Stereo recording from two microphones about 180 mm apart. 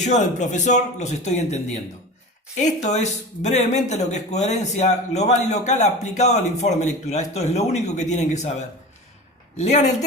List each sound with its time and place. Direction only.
0.0 s speech: 40° left (ahead or behind)